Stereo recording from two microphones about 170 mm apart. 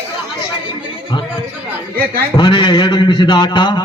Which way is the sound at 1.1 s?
25° left (ahead or behind).